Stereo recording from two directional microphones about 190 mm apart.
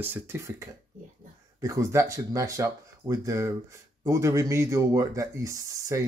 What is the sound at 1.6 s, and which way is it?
Speech, 15° right (ahead or behind).